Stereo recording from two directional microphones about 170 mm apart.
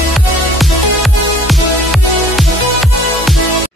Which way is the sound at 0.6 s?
Centre (ahead or behind).